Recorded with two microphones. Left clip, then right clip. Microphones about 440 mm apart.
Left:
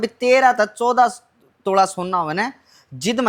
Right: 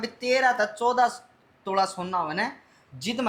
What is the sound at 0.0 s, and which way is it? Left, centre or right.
Speech, left.